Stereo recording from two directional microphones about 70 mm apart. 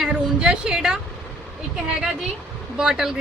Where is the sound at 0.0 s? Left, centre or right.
Centre.